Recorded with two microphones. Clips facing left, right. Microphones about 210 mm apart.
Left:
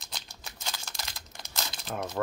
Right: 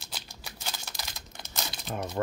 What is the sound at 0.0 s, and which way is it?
Computer keyboard, 5° right (ahead or behind).